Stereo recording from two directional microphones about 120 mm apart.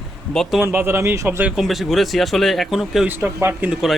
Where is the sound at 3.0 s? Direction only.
20° right (ahead or behind).